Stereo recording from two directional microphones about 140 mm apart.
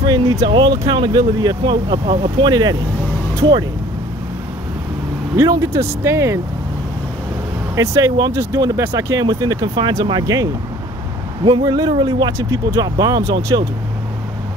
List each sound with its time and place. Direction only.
0.0 s speech: 30° right (ahead or behind)
5.4 s speech: 20° right (ahead or behind)
7.7 s speech: 25° right (ahead or behind)